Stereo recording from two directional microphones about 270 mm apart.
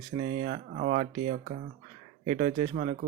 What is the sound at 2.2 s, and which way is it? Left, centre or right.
Speech, centre.